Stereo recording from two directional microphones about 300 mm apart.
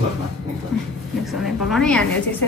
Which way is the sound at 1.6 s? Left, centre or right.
Centre.